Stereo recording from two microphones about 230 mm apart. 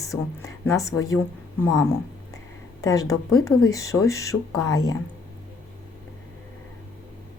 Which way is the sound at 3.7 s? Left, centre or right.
Centre.